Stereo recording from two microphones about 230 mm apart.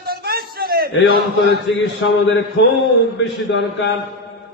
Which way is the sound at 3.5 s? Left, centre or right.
Left.